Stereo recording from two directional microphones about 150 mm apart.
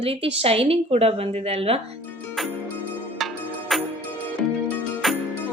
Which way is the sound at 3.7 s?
Centre (ahead or behind).